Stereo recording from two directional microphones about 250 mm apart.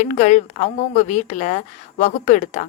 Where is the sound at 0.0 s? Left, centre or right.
Left.